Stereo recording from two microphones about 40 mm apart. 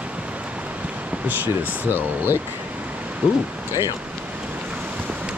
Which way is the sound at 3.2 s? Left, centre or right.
Right.